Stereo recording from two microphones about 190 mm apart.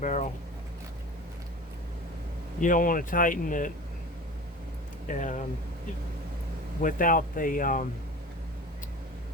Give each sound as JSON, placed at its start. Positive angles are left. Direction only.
{"t": 0.0, "sound": "a sound", "side_deg": 40}
{"t": 2.6, "sound": "speech", "side_deg": 45}
{"t": 5.0, "sound": "speech", "side_deg": 40}
{"t": 6.8, "sound": "speech", "side_deg": 45}